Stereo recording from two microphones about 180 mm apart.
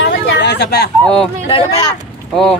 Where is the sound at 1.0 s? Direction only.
5° left (ahead or behind).